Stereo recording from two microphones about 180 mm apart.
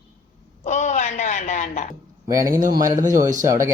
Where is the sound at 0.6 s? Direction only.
40° left (ahead or behind).